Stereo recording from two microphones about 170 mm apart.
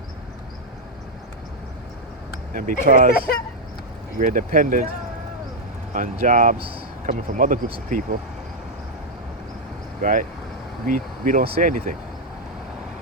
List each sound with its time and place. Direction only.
2.5 s speech: 55° right (ahead or behind)
4.2 s speech: 50° right (ahead or behind)
5.9 s speech: 50° right (ahead or behind)
10.0 s speech: 50° right (ahead or behind)